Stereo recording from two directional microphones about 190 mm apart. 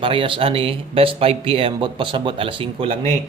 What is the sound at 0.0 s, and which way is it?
Speech, 30° right (ahead or behind).